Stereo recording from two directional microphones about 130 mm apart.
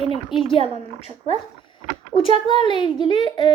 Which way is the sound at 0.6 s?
50° right (ahead or behind).